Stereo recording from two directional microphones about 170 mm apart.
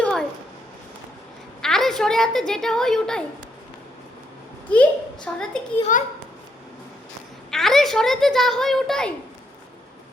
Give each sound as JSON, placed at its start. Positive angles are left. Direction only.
{"t": 0.0, "sound": "a sound", "side_deg": 5}
{"t": 1.6, "sound": "a woman's voice", "side_deg": 5}
{"t": 4.7, "sound": "a child's voice", "side_deg": 5}
{"t": 5.9, "sound": "a child's voice", "side_deg": 50}
{"t": 7.5, "sound": "a child's voice", "side_deg": 0}